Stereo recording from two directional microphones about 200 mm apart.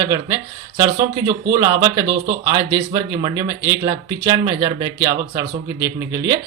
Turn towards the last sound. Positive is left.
turn(degrees=-20)  # may be behind; listen again after turning